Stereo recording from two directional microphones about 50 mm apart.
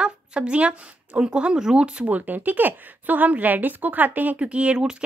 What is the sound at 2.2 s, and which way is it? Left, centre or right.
A woman's voice, right.